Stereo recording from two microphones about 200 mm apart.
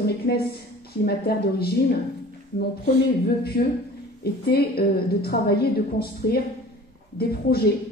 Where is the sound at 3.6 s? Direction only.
50° left (ahead or behind).